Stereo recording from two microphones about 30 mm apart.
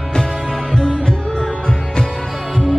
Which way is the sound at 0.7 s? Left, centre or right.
Left.